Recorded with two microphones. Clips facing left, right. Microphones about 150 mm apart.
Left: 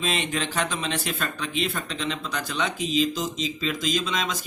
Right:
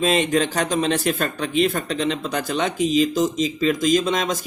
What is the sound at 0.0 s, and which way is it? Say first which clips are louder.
Speech: right 9 dB; 45° right (ahead or behind).